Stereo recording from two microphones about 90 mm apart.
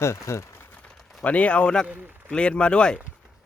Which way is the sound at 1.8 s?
15° right (ahead or behind).